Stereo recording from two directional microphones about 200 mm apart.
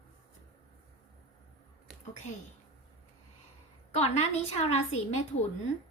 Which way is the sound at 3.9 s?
30° left (ahead or behind).